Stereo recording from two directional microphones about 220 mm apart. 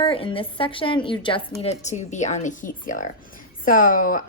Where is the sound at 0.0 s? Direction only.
25° left (ahead or behind).